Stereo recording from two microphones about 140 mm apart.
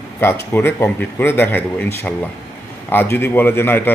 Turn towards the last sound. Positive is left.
turn(degrees=15)  # may be behind; listen again after turning